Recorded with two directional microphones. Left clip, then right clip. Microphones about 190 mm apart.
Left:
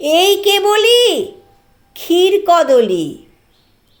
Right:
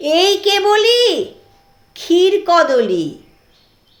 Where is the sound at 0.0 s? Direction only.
35° left (ahead or behind).